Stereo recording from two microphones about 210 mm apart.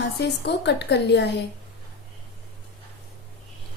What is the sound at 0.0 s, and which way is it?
A woman's voice, 55° left (ahead or behind).